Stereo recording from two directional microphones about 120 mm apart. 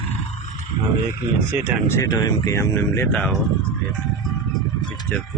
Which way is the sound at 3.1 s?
5° left (ahead or behind).